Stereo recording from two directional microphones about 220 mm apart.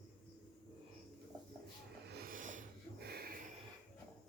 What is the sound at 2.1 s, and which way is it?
Snort, 45° right (ahead or behind).